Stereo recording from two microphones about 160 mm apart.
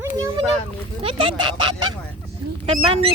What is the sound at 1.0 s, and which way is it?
Speech, 35° right (ahead or behind).